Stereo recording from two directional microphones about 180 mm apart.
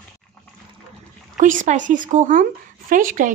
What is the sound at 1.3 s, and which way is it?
Speech, 45° right (ahead or behind).